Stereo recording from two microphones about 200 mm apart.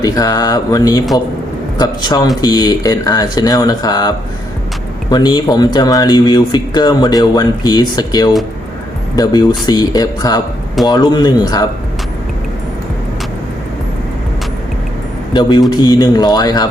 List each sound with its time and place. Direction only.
0.0 s speech: 20° left (ahead or behind)
5.1 s speech: 20° left (ahead or behind)
15.3 s speech: 20° left (ahead or behind)